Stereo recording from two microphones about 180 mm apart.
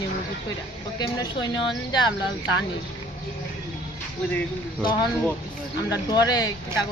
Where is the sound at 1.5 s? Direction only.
25° left (ahead or behind).